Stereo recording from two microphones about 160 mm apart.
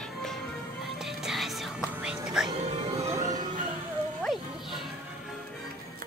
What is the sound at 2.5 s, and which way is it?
Music, 40° right (ahead or behind).